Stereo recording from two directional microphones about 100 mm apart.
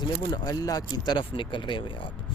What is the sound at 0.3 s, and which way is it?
Speech, 40° left (ahead or behind).